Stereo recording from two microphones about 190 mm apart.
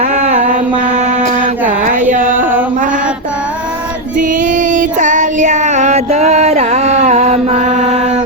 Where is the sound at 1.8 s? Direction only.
40° right (ahead or behind).